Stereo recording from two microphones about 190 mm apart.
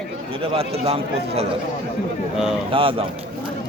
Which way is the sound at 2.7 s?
30° right (ahead or behind).